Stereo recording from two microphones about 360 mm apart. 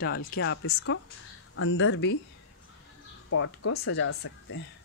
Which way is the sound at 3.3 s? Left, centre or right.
Left.